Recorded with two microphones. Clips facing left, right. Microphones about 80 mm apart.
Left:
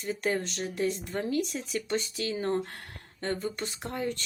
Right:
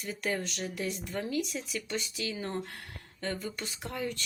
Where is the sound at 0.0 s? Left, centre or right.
Left.